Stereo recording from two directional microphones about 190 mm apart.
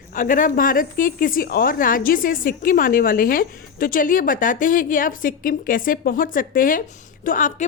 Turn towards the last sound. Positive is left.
turn(degrees=45)  # may be behind; listen again after turning